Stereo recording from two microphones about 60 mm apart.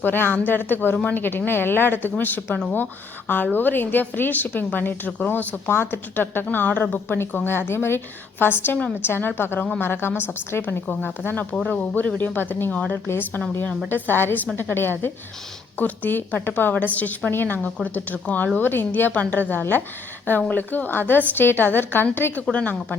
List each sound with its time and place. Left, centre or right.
0.0 s a woman's voice: left